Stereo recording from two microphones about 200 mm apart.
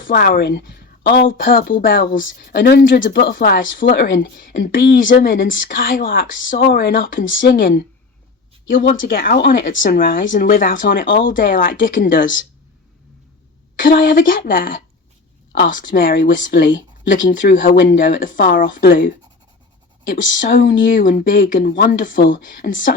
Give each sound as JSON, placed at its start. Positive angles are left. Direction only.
{"t": 0.1, "sound": "speech", "side_deg": 50}
{"t": 9.0, "sound": "speech", "side_deg": 45}
{"t": 13.7, "sound": "speech", "side_deg": 45}
{"t": 20.1, "sound": "speech", "side_deg": 40}